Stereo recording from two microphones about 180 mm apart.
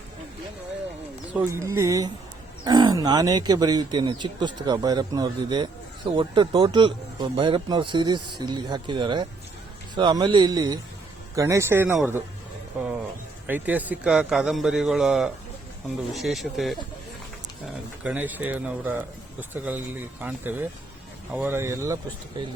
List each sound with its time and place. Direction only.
1.3 s speech: 10° right (ahead or behind)
13.5 s speech: 10° right (ahead or behind)
18.0 s speech: 10° right (ahead or behind)
22.4 s speech: 25° right (ahead or behind)